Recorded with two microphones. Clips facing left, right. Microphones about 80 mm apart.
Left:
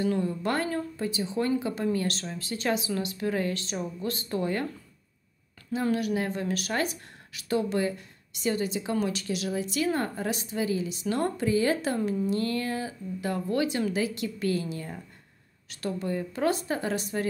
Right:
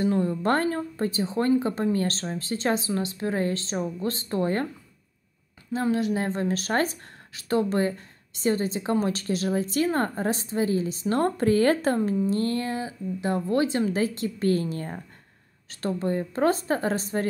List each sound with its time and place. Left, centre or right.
0.0 s speech: right
5.7 s speech: right
12.3 s speech: right